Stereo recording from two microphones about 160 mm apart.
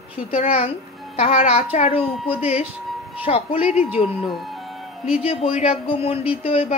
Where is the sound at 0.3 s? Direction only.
40° left (ahead or behind).